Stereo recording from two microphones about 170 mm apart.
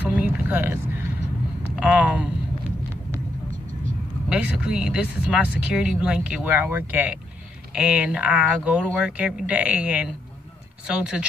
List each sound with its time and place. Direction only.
0.0 s vehicle: 10° right (ahead or behind)
1.8 s a sound: 5° right (ahead or behind)
4.3 s speech: 5° right (ahead or behind)